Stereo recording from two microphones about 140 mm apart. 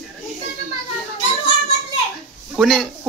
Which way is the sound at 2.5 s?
Centre (ahead or behind).